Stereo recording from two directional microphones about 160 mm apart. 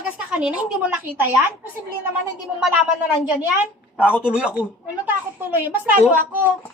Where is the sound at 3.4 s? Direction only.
10° right (ahead or behind).